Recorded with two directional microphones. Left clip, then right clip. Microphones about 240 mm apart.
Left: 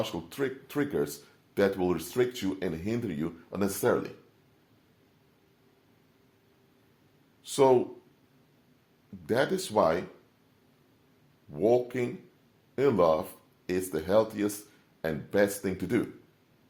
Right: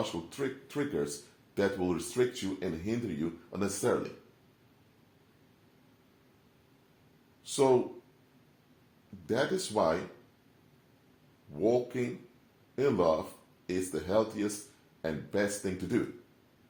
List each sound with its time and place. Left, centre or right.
0.0 s speech: left
7.4 s speech: left
9.2 s speech: left
11.5 s speech: left